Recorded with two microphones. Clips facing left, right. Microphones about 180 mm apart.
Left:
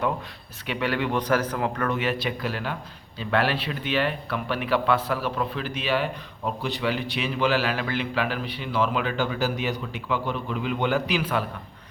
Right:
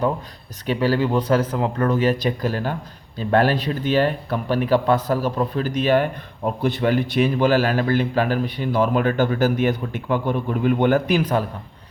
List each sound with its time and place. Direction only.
0.7 s speech: 35° right (ahead or behind)